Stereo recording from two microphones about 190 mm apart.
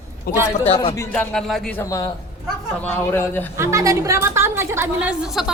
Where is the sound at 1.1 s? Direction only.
5° left (ahead or behind).